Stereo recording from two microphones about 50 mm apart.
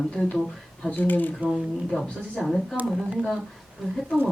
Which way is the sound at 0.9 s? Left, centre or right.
Left.